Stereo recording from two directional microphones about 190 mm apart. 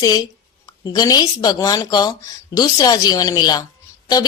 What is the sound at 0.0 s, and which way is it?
A woman's voice, 20° left (ahead or behind).